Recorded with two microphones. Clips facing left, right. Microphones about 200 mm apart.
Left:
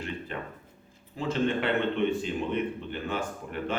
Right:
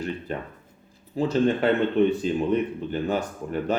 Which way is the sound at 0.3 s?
40° right (ahead or behind).